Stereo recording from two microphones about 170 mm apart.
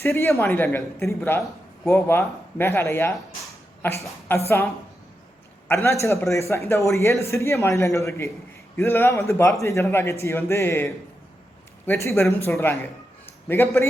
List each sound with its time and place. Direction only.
0.0 s a man's voice: 15° left (ahead or behind)